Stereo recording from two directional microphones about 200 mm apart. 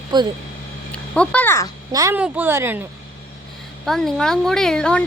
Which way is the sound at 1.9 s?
20° right (ahead or behind).